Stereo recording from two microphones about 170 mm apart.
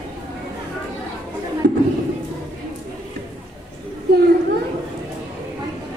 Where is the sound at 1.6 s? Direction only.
70° right (ahead or behind).